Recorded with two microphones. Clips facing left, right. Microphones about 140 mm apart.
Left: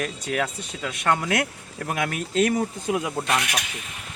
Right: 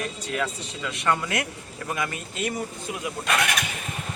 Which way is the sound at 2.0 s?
80° left.